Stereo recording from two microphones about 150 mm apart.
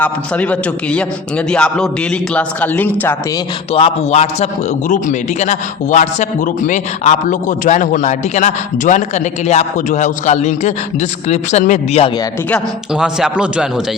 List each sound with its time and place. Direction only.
0.0 s a man's voice: 10° left (ahead or behind)
3.7 s a man's voice: 40° left (ahead or behind)
12.9 s a man's voice: 5° right (ahead or behind)